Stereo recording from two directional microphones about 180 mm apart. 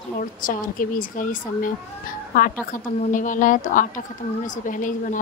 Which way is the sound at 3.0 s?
45° left (ahead or behind).